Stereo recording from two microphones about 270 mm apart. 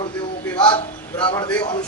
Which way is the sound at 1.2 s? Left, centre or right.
Centre.